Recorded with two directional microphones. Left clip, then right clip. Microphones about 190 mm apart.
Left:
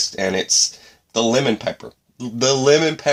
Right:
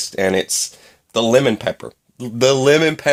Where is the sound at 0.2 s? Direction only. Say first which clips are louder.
Right 2 dB; 45° right (ahead or behind).